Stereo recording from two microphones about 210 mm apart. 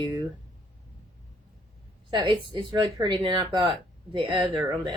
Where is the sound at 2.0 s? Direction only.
25° right (ahead or behind).